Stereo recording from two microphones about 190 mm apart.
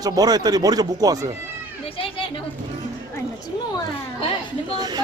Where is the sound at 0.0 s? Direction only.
20° right (ahead or behind).